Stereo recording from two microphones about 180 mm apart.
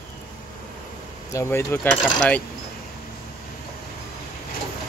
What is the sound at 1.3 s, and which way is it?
A man's voice, 15° left (ahead or behind).